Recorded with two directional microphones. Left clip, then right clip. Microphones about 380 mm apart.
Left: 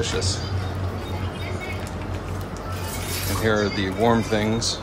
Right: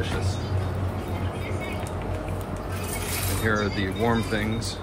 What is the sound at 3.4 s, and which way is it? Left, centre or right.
Speech, centre.